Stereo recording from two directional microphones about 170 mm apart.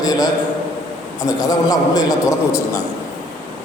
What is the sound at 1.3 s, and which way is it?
A man's voice, 20° left (ahead or behind).